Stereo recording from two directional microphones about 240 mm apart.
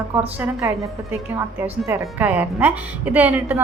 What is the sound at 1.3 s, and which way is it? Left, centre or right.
A woman's voice, centre.